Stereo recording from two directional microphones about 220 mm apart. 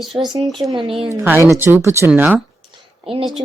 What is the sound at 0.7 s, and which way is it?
Speech, 25° right (ahead or behind).